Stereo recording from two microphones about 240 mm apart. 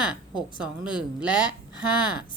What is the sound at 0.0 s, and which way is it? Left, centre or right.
A woman's voice, centre.